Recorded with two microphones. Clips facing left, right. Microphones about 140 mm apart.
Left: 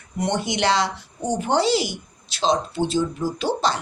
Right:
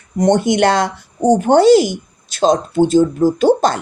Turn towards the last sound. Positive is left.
turn(degrees=-50)  # may be behind; listen again after turning